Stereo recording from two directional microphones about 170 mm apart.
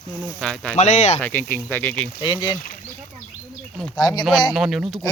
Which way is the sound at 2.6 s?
50° left (ahead or behind).